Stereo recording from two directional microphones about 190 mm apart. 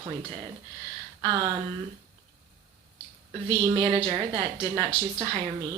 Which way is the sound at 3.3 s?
25° right (ahead or behind).